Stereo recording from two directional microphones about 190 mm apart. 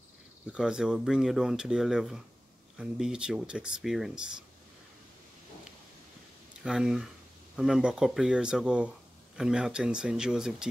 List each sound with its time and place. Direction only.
0.5 s speech: 5° right (ahead or behind)
6.6 s speech: 5° right (ahead or behind)